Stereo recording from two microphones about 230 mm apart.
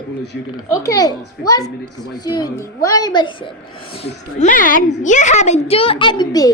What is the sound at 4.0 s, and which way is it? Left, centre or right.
A child's voice, left.